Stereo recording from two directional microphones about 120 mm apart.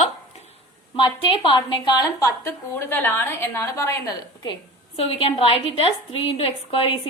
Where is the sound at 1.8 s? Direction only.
35° left (ahead or behind).